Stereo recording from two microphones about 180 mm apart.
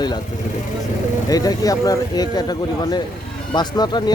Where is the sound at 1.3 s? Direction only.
20° left (ahead or behind).